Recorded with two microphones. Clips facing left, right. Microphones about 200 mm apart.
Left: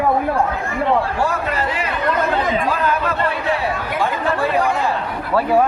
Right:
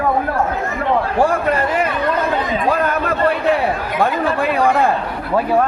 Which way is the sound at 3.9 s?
55° right (ahead or behind).